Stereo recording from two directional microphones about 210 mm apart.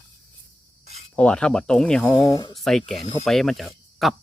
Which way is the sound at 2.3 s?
20° left (ahead or behind).